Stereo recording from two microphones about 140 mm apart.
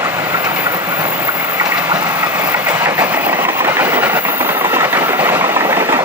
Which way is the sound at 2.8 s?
15° right (ahead or behind).